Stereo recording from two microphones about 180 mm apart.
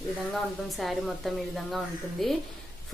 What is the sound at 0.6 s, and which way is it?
A woman's voice, centre (ahead or behind).